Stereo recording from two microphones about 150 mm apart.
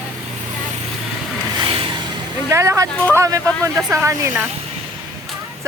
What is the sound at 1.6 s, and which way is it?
Vehicle, 35° right (ahead or behind).